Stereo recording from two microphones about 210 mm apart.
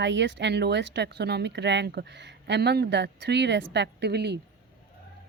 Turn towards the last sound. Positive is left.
turn(degrees=-50)  # may be behind; listen again after turning